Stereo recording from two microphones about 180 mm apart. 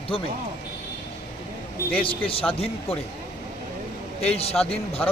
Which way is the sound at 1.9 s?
30° left (ahead or behind).